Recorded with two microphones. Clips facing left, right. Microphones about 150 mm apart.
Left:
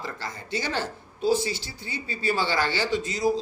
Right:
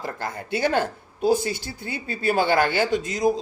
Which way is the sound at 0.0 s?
55° right (ahead or behind).